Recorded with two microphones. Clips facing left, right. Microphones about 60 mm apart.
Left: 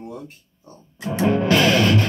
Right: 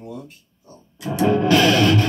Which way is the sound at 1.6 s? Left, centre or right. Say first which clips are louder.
Right 1 dB; centre.